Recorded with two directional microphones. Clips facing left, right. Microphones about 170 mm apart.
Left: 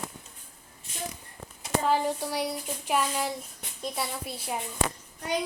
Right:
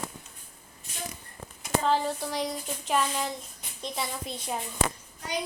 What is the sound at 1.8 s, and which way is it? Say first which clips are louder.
Speech: left 1 dB; 10° left (ahead or behind).